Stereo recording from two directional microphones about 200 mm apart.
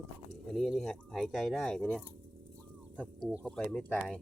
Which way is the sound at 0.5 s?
Centre (ahead or behind).